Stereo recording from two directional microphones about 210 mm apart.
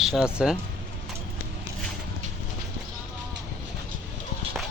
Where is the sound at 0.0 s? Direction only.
Centre (ahead or behind).